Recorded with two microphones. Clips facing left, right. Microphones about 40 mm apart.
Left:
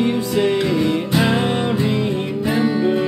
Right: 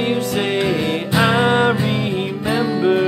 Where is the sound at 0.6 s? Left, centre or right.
Right.